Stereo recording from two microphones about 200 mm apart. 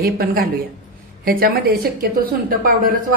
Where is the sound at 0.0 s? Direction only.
45° right (ahead or behind).